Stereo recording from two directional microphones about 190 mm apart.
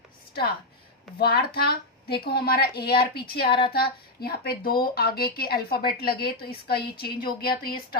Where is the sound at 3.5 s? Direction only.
25° left (ahead or behind).